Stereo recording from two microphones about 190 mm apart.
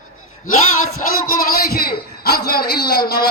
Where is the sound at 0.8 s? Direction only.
45° left (ahead or behind).